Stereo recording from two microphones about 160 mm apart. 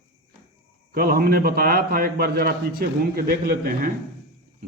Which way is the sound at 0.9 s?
70° right (ahead or behind).